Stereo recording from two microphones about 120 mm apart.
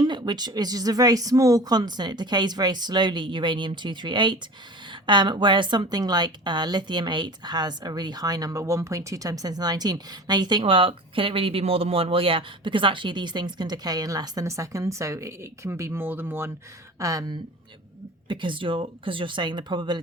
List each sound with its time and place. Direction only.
0.0 s a woman's voice: 40° right (ahead or behind); by 16.5 s 20° right (ahead or behind)
17.0 s speech: 30° right (ahead or behind)
18.3 s speech: 45° right (ahead or behind)